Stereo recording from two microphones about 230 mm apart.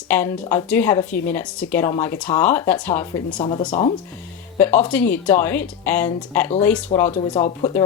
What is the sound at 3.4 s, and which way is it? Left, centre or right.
Speech, left.